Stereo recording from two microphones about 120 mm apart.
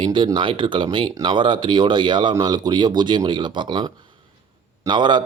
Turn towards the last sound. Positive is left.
turn(degrees=-40)  # may be behind; listen again after turning